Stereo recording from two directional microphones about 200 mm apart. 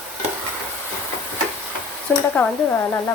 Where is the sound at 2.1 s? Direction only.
5° left (ahead or behind).